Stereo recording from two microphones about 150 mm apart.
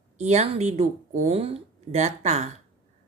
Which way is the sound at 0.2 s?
45° right (ahead or behind).